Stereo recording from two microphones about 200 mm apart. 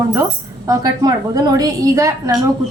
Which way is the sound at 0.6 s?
15° right (ahead or behind).